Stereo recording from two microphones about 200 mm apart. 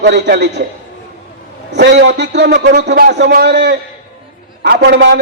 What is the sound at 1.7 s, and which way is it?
A man's voice, 60° right (ahead or behind).